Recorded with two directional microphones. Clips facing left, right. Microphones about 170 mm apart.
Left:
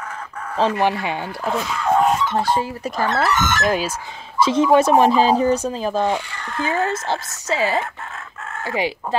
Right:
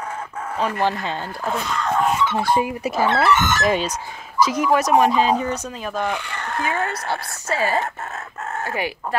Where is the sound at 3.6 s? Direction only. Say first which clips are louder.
Even; 5° left (ahead or behind).